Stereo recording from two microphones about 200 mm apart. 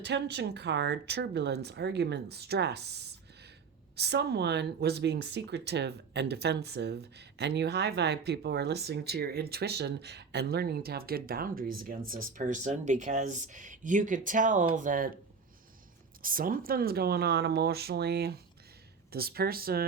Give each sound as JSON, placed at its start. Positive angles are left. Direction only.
{"t": 0.0, "sound": "speech", "side_deg": -60}
{"t": 16.2, "sound": "speech", "side_deg": -45}